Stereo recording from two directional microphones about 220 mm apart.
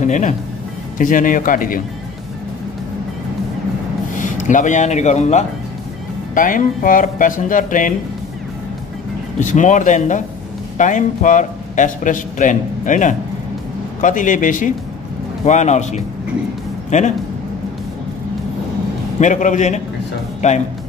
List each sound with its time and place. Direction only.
0.0 s a man's voice: 35° left (ahead or behind)
4.1 s a man's voice: 35° left (ahead or behind)
9.4 s a man's voice: 35° left (ahead or behind)
19.1 s a man's voice: 35° left (ahead or behind)